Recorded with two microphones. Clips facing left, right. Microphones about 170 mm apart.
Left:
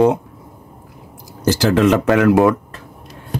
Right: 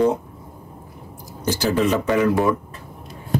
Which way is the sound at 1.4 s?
90° left.